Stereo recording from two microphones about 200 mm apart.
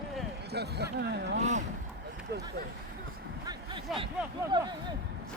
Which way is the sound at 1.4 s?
35° right (ahead or behind).